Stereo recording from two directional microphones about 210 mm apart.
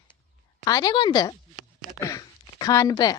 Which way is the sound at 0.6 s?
15° left (ahead or behind).